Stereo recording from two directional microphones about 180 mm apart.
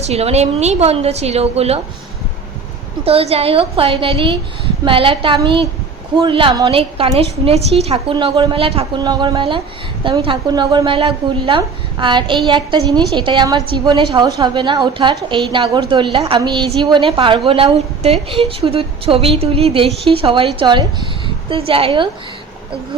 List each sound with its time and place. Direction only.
0.0 s a woman's voice: 35° right (ahead or behind)
3.0 s a woman's voice: 35° right (ahead or behind)